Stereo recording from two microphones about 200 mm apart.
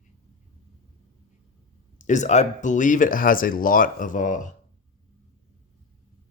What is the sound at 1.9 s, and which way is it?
Speech, 35° left (ahead or behind).